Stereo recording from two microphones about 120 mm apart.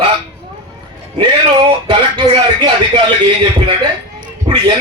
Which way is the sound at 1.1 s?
45° right (ahead or behind).